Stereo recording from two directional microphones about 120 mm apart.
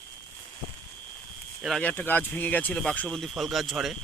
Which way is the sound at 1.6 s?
Centre (ahead or behind).